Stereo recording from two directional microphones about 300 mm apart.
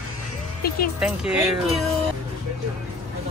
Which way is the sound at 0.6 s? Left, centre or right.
Left.